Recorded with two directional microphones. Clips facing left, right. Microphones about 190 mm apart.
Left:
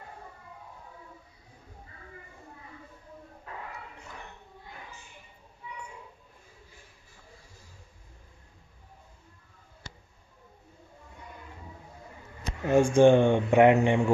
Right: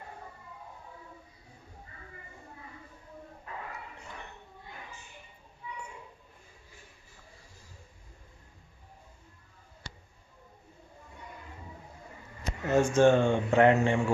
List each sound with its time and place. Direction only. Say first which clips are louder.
12.6 s speech: left 3 dB; 15° left (ahead or behind)